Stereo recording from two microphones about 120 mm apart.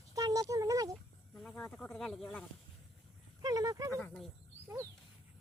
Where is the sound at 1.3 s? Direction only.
5° left (ahead or behind).